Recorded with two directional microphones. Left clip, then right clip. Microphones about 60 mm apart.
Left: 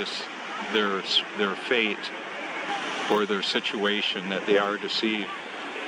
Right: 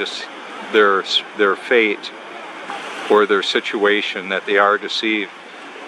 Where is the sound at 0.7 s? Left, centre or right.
Right.